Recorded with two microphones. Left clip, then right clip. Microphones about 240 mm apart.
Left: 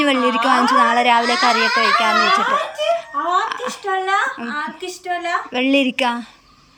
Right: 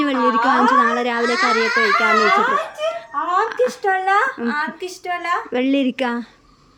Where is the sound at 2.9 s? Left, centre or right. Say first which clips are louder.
Left 3 dB; centre.